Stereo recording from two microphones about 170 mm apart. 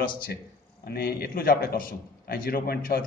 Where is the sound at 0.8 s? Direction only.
65° left (ahead or behind).